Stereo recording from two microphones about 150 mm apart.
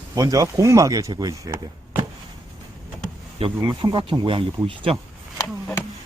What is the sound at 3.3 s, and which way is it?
Speech, 35° right (ahead or behind).